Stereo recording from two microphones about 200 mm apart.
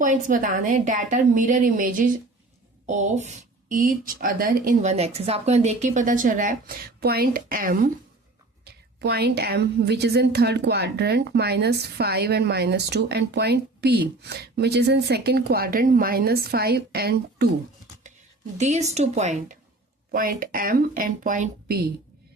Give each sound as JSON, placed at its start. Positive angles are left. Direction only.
{"t": 0.0, "sound": "a woman's voice", "side_deg": -40}
{"t": 18.5, "sound": "a woman's voice", "side_deg": -35}